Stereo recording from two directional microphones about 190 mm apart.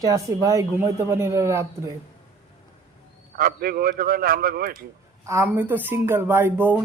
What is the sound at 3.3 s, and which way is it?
A man's voice, 50° right (ahead or behind).